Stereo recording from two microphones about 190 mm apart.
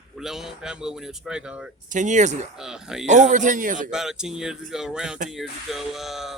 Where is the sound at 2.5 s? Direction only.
5° right (ahead or behind).